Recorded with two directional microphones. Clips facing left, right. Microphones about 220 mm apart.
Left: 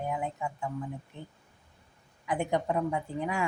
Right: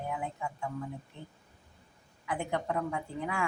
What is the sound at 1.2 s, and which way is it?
Speech, 20° left (ahead or behind).